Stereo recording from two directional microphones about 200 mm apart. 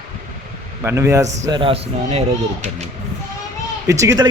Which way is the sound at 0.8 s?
15° right (ahead or behind).